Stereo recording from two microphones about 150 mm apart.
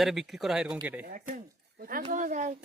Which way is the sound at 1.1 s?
60° right (ahead or behind).